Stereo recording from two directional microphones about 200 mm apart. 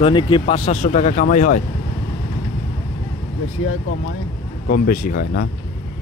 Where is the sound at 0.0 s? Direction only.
25° left (ahead or behind); by 1.6 s 40° left (ahead or behind).